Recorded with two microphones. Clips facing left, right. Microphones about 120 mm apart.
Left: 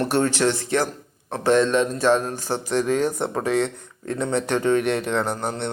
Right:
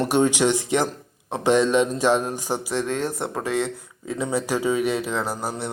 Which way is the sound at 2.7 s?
Centre (ahead or behind).